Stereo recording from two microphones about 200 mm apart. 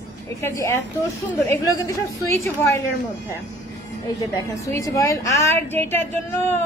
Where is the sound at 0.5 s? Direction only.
15° left (ahead or behind).